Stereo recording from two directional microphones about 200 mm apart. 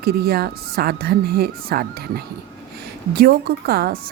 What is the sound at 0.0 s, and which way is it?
Speech, 50° right (ahead or behind).